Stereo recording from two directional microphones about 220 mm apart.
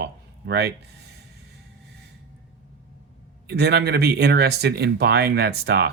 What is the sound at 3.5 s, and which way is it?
Speech, 50° right (ahead or behind).